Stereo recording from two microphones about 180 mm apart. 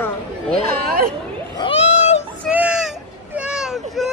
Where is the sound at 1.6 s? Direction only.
35° left (ahead or behind).